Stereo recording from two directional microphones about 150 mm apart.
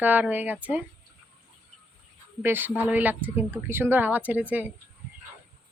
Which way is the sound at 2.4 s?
15° right (ahead or behind).